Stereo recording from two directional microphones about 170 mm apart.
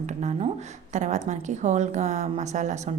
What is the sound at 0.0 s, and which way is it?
A woman's voice, 45° right (ahead or behind).